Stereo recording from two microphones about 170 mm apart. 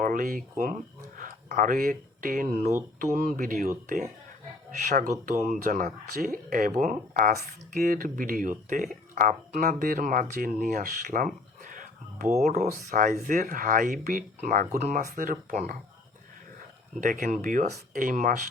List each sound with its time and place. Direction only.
0.0 s speech: 55° right (ahead or behind)
17.0 s speech: 50° right (ahead or behind)